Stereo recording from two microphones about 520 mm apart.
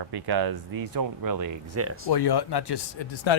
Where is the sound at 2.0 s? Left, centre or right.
Left.